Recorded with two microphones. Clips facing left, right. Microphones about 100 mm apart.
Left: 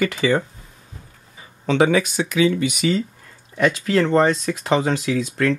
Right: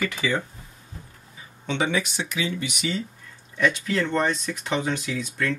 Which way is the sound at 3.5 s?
90° left.